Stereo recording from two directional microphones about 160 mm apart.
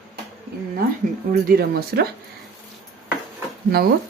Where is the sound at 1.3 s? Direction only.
75° right (ahead or behind).